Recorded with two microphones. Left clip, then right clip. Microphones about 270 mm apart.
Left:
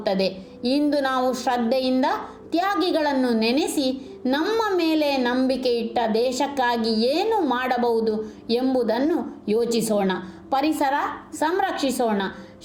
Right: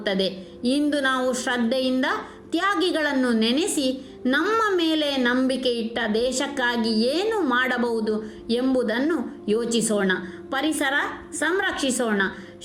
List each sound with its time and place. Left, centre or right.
0.0 s a woman's voice: left